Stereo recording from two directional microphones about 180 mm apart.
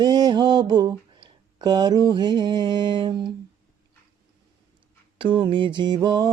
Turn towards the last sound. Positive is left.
turn(degrees=-20)  # may be behind; listen again after turning